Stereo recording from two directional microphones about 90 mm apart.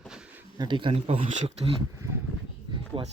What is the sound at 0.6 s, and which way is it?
Speech, 60° right (ahead or behind).